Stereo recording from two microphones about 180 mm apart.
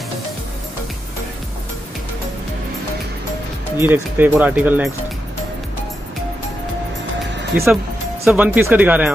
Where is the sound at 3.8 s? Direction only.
10° right (ahead or behind).